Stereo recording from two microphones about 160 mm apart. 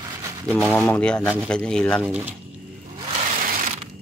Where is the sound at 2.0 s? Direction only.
5° right (ahead or behind).